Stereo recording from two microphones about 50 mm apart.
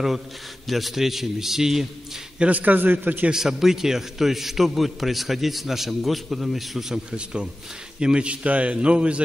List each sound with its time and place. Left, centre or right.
0.7 s a man's voice: centre
2.3 s a man's voice: right
2.6 s a man's voice: right
3.3 s a man's voice: centre